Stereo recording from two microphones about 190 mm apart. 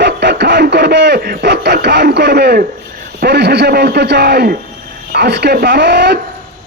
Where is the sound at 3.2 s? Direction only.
60° right (ahead or behind).